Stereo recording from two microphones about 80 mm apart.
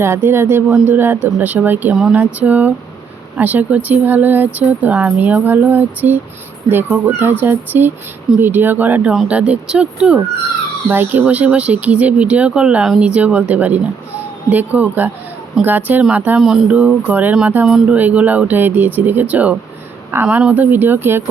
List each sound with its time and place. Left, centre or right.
0.0 s speech: right; by 10.2 s centre
10.8 s speech: right
16.4 s speech: centre
16.6 s speech: centre